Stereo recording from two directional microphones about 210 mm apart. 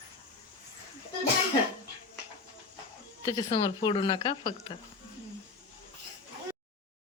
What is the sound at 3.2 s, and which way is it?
Speech, 25° left (ahead or behind).